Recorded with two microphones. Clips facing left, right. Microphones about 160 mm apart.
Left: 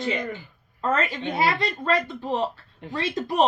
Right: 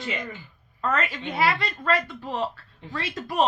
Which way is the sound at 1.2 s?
25° left (ahead or behind).